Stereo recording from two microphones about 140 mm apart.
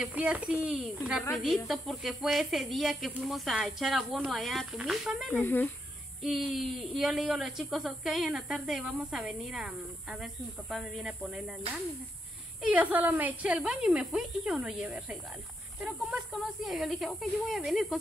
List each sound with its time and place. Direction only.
0.0 s speech: 10° right (ahead or behind)
5.3 s speech: 15° left (ahead or behind)
6.2 s speech: centre (ahead or behind)
12.6 s speech: 10° right (ahead or behind)